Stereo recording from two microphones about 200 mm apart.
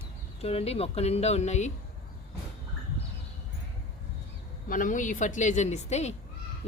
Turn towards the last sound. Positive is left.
turn(degrees=35)  # may be behind; listen again after turning